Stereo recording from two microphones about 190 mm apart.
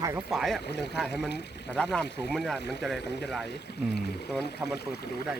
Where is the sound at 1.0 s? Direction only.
Centre (ahead or behind).